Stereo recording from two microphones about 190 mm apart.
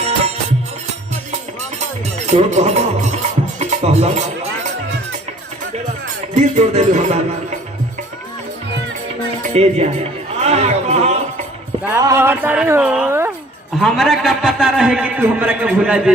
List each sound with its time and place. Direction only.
2.2 s music: 35° right (ahead or behind)
6.3 s music: 35° right (ahead or behind)
9.6 s a sound: 35° right (ahead or behind)
11.9 s speech: 15° right (ahead or behind)
13.8 s a man's voice: centre (ahead or behind)